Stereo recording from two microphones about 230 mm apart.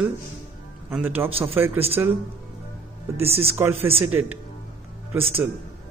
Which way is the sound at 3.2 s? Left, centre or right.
Right.